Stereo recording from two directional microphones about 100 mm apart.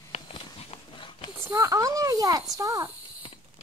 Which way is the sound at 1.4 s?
30° right (ahead or behind).